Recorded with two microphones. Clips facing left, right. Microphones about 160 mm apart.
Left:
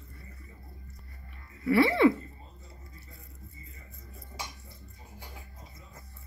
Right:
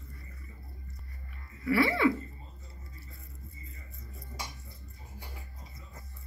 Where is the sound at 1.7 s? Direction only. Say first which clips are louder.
Left 4 dB; 25° left (ahead or behind).